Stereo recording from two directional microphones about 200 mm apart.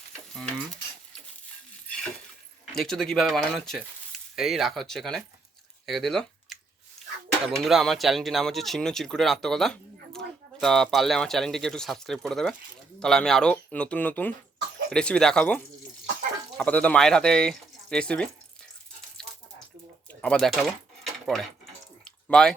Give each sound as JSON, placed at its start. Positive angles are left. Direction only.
{"t": 2.7, "sound": "speech", "side_deg": 0}
{"t": 5.8, "sound": "a sound", "side_deg": 0}
{"t": 7.4, "sound": "speech", "side_deg": 0}
{"t": 20.2, "sound": "speech", "side_deg": 0}